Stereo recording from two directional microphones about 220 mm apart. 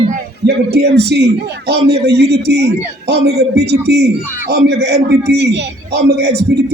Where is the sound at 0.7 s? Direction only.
50° right (ahead or behind).